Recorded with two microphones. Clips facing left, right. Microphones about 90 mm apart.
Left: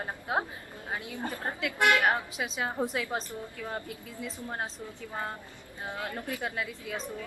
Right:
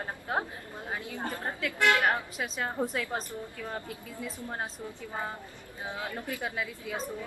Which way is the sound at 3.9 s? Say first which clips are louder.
Even; centre (ahead or behind).